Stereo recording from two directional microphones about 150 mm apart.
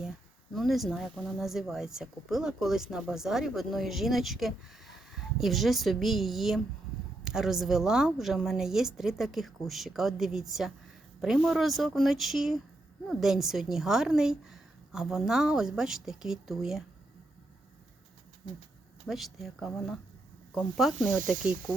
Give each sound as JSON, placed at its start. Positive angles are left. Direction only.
{"t": 0.0, "sound": "speech", "side_deg": 0}
{"t": 19.0, "sound": "speech", "side_deg": 0}